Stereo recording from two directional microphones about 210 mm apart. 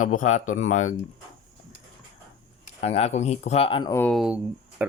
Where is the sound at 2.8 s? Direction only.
30° left (ahead or behind).